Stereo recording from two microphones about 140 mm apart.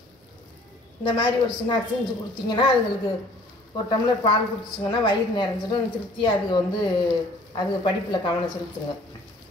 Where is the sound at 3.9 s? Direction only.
30° left (ahead or behind).